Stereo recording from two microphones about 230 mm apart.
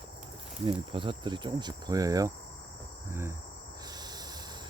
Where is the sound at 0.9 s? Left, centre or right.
Right.